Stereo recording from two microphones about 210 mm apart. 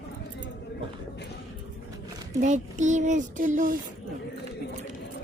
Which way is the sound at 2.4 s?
35° right (ahead or behind).